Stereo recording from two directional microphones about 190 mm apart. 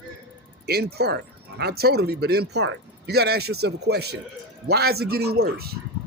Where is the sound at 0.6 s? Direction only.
55° right (ahead or behind).